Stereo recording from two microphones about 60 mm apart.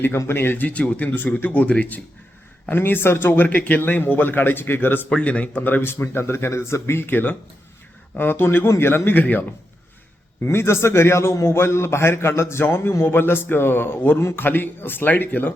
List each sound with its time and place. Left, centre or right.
0.3 s speech: left
2.6 s speech: left
3.4 s speech: left
5.0 s speech: centre; by 8.7 s left
9.0 s speech: left
10.4 s a man's voice: left